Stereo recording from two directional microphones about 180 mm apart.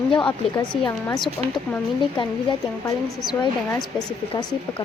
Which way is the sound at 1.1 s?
25° left (ahead or behind).